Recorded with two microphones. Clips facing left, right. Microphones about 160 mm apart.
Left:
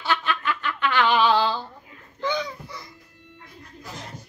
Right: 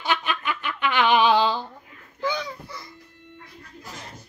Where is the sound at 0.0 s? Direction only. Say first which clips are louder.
Left 1 dB; 15° right (ahead or behind).